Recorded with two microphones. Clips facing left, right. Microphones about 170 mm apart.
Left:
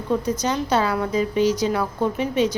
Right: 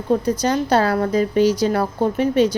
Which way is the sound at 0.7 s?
35° right (ahead or behind).